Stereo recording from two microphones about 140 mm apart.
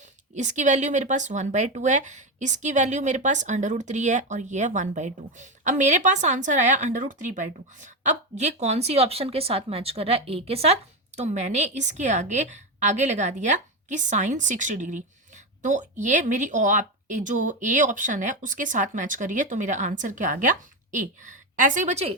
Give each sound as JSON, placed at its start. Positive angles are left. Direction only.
{"t": 0.3, "sound": "speech", "side_deg": -60}